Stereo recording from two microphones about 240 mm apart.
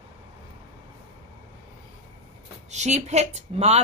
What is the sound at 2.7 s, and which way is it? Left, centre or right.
A woman's voice, right.